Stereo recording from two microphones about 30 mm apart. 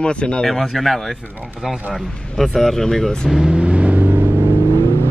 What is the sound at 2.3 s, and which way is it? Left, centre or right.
Speech, centre.